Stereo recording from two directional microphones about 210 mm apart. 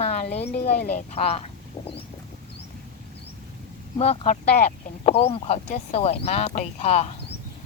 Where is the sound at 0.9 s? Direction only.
30° left (ahead or behind).